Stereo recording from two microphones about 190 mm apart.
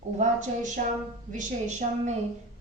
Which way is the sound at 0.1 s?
35° right (ahead or behind).